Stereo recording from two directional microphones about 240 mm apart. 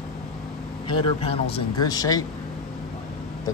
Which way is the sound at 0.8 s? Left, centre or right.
Left.